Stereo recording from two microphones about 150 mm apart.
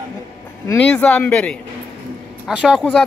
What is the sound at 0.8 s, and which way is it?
Speech, 10° left (ahead or behind).